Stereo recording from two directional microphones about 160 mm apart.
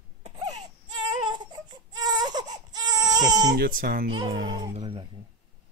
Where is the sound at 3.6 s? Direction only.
60° right (ahead or behind).